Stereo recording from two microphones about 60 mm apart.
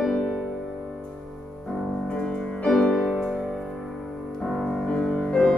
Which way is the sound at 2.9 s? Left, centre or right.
Centre.